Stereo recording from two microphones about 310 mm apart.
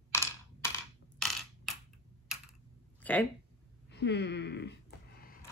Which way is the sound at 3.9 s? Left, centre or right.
Left.